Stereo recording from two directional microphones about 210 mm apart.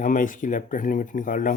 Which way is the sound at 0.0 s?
40° left (ahead or behind).